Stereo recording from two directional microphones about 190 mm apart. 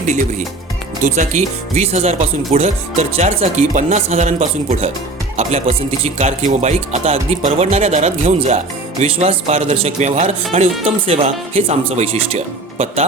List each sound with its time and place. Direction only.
1.0 s speech: 40° right (ahead or behind)